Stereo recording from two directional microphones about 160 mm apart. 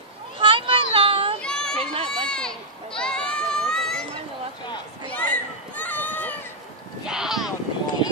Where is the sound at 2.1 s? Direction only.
5° left (ahead or behind).